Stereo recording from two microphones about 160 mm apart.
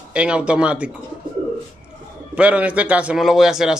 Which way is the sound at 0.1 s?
5° right (ahead or behind).